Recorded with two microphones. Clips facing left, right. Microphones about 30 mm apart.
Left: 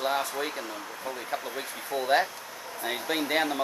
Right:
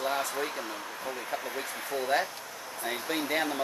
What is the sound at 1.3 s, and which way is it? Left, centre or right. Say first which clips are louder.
Speech: left 1 dB; centre.